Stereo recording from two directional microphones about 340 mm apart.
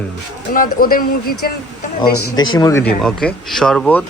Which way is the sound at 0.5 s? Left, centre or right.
Left.